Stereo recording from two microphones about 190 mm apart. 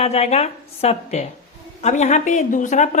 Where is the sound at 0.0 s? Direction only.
35° left (ahead or behind).